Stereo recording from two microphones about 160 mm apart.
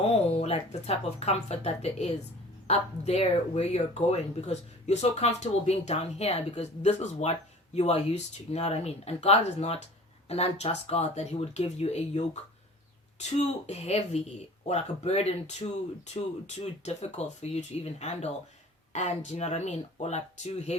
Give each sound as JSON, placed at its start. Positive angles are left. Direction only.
{"t": 0.0, "sound": "speech", "side_deg": 40}